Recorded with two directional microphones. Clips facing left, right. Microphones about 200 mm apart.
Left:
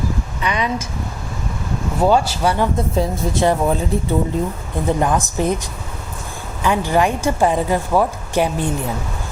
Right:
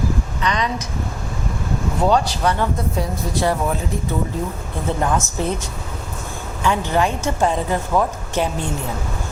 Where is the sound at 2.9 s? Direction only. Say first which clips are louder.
Left 4 dB; 25° left (ahead or behind).